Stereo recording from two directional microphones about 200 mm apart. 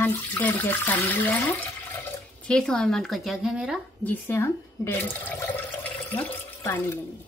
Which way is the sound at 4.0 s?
10° left (ahead or behind).